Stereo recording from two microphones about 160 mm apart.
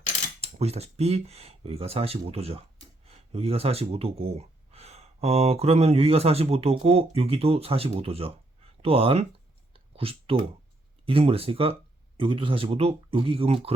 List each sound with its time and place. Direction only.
0.4 s speech: 40° right (ahead or behind)
9.7 s clicking: 35° right (ahead or behind)
11.0 s speech: 35° right (ahead or behind)